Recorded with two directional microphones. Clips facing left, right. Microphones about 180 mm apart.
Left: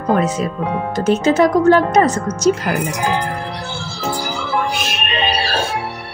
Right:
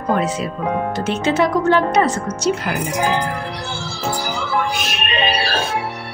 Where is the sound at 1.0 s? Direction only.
40° left (ahead or behind).